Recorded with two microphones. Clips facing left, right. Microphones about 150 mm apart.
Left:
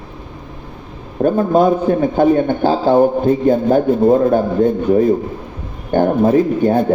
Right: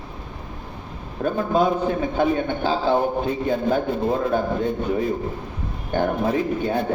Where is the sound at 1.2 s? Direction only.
45° left (ahead or behind).